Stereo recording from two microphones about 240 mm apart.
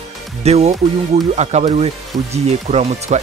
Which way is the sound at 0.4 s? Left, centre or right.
Right.